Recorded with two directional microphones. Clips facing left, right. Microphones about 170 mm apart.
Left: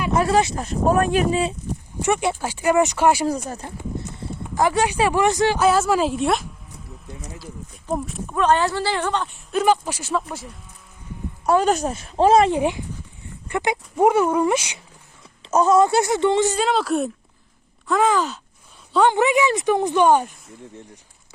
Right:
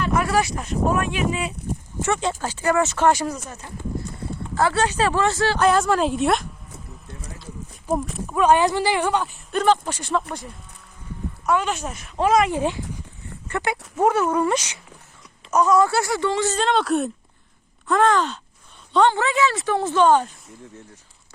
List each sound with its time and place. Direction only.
0.1 s speech: 25° left (ahead or behind)
2.0 s speech: 15° left (ahead or behind)
4.5 s speech: 15° left (ahead or behind)
5.5 s speech: 5° left (ahead or behind)
7.9 s speech: centre (ahead or behind)
11.4 s speech: 35° left (ahead or behind)
12.5 s speech: 15° left (ahead or behind)
15.4 s speech: 25° left (ahead or behind)